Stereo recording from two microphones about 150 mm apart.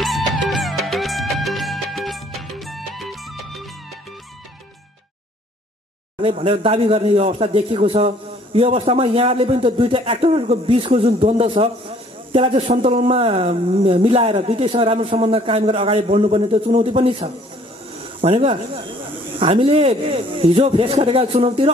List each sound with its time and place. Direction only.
0.0 s music: centre (ahead or behind)
6.2 s speech: 40° right (ahead or behind)